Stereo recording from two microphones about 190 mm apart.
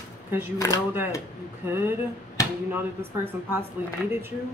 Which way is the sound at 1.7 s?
10° right (ahead or behind).